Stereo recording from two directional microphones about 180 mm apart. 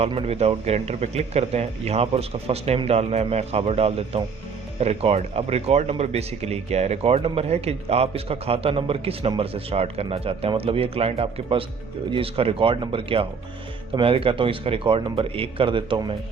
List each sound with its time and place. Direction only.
0.0 s speech: 35° right (ahead or behind)